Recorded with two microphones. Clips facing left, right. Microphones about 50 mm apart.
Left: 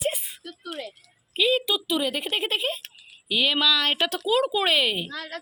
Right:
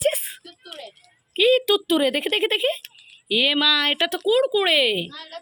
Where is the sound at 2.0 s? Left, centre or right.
Right.